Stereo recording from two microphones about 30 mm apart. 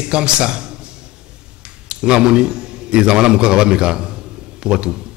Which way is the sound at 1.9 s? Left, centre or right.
Right.